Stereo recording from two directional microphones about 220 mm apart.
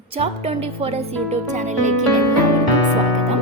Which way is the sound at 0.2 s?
25° right (ahead or behind).